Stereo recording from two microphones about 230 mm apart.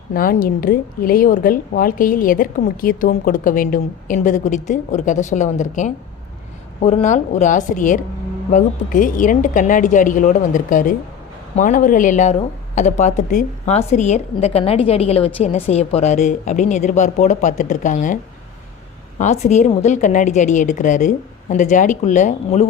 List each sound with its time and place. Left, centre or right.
0.1 s a woman's voice: left
19.2 s a woman's voice: left